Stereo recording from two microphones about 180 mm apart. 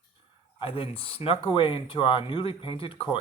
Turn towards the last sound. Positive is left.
turn(degrees=30)  # may be behind; listen again after turning